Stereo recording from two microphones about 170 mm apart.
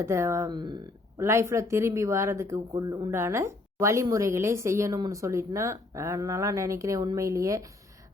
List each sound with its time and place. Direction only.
0.0 s a woman's voice: 15° right (ahead or behind)